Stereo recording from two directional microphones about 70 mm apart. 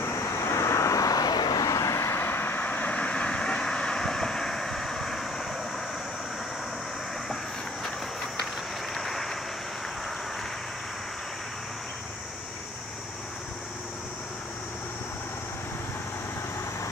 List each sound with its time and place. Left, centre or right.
0.0 s vehicle: left
1.7 s vehicle: left; by 5.2 s centre
8.9 s vehicle: centre